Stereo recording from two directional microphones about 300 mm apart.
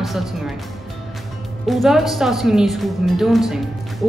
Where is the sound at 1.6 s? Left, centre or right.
Centre.